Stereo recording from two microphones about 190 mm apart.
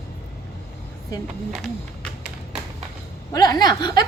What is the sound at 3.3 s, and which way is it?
Speech, 20° left (ahead or behind).